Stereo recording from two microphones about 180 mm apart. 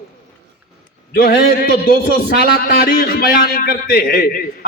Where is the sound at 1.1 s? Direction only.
60° left (ahead or behind).